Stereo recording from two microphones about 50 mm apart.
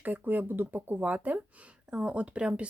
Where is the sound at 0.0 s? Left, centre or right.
Right.